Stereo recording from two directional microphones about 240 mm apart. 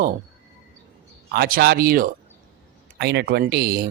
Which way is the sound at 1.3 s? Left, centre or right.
Right.